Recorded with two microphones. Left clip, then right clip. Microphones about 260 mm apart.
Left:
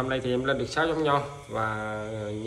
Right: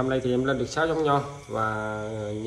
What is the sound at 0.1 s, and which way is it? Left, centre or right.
Speech, centre.